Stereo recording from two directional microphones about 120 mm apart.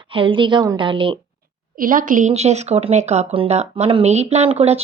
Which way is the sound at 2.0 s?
90° right.